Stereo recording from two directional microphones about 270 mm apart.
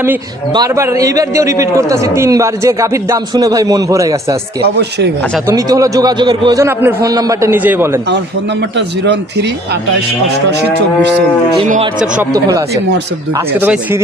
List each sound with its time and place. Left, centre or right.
0.0 s a man's voice: centre
4.6 s a man's voice: right
5.5 s a man's voice: centre
8.7 s a man's voice: right
11.5 s speech: right
12.0 s a man's voice: centre